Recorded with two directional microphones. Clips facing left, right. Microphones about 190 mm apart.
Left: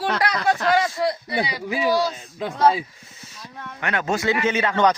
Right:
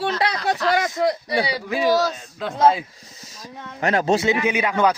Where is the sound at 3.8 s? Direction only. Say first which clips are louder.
Right 5 dB; 35° right (ahead or behind).